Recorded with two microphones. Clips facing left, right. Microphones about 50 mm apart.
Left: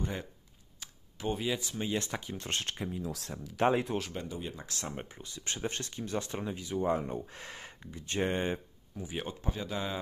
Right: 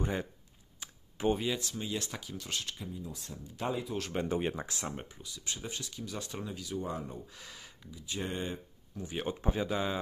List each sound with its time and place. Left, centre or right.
0.8 s computer keyboard: centre
1.3 s speech: centre
1.7 s speech: left
2.3 s speech: left
3.0 s speech: left
4.3 s speech: right
4.6 s speech: right
5.0 s speech: left
8.9 s speech: centre
9.3 s speech: centre
9.7 s speech: centre